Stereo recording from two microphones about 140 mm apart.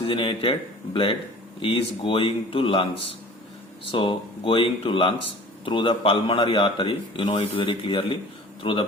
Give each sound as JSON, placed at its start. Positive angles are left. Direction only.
{"t": 0.0, "sound": "a man's voice", "side_deg": 40}
{"t": 1.6, "sound": "a man's voice", "side_deg": 40}